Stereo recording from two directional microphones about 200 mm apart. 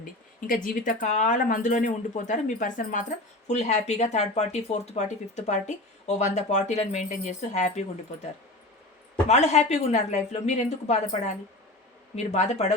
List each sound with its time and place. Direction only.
0.0 s speech: 45° left (ahead or behind)
9.3 s speech: 35° left (ahead or behind)